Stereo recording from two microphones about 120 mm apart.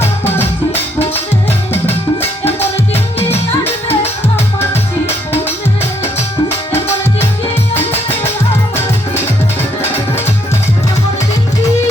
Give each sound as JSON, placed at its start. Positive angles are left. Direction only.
{"t": 0.3, "sound": "music", "side_deg": 20}
{"t": 2.4, "sound": "music", "side_deg": 20}
{"t": 2.9, "sound": "music", "side_deg": 55}
{"t": 3.6, "sound": "music", "side_deg": 20}
{"t": 6.7, "sound": "music", "side_deg": 20}